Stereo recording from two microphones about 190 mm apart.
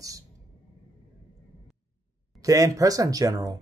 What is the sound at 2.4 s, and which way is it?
Speech, 15° right (ahead or behind).